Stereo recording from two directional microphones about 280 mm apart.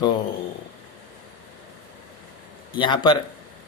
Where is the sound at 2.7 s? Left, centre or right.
Centre.